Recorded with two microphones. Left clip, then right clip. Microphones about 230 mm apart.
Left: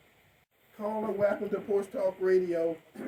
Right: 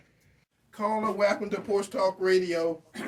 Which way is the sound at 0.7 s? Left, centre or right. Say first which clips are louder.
Right 4 dB; right.